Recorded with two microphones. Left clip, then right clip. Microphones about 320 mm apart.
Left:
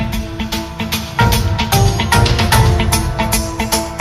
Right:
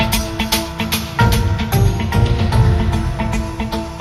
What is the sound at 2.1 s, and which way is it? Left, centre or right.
Music, left.